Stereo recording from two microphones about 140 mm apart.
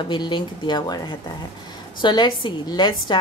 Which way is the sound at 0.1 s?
35° left (ahead or behind).